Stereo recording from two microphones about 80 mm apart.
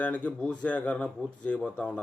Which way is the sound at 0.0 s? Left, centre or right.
Centre.